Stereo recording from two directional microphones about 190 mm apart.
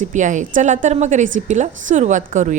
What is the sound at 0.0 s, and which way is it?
A woman's voice, 40° right (ahead or behind).